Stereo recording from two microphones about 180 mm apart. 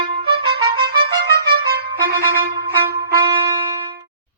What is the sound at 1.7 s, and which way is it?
Music, 60° right (ahead or behind).